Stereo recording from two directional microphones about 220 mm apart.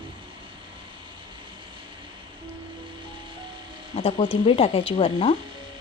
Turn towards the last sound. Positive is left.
turn(degrees=25)  # may be behind; listen again after turning